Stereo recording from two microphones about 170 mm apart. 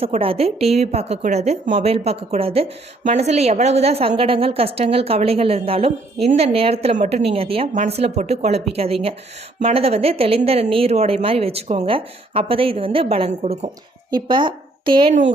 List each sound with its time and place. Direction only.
0.0 s a woman's voice: 35° right (ahead or behind)